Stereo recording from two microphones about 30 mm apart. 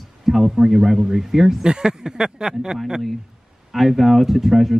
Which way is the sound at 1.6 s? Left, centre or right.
Right.